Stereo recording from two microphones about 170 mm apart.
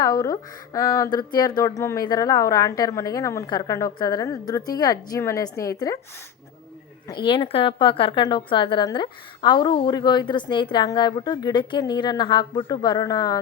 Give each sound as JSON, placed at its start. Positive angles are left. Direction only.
{"t": 0.0, "sound": "a woman's voice", "side_deg": 20}
{"t": 7.1, "sound": "a woman's voice", "side_deg": 30}